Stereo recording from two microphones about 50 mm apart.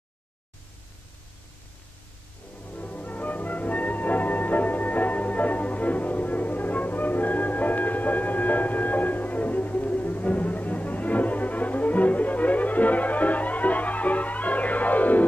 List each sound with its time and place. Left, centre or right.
2.6 s music: left